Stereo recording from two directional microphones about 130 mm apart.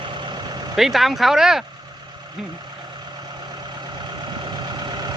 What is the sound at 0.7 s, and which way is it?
Speech, centre (ahead or behind).